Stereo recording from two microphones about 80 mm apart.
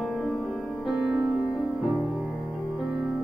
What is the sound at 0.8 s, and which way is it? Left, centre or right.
Music, centre.